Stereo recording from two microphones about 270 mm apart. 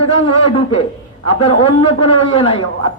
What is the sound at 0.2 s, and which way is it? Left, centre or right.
A man's voice, left.